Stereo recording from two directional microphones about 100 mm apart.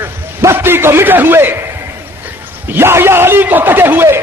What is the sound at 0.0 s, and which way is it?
A man's voice, 25° right (ahead or behind).